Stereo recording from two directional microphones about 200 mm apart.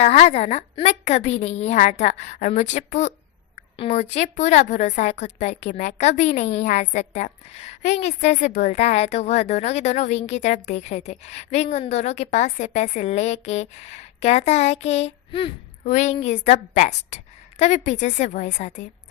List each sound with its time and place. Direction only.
0.0 s a woman's voice: 30° left (ahead or behind)